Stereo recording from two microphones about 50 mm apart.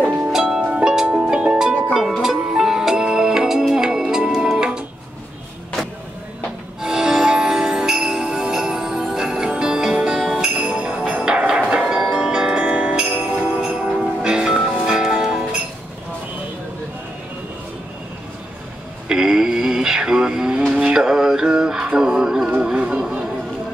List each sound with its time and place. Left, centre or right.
0.0 s music: right
0.3 s music: centre
0.6 s music: right
2.2 s music: centre
6.8 s music: centre
12.6 s music: right; by 15.4 s centre
19.0 s synthetic singing: centre
22.6 s a sound: centre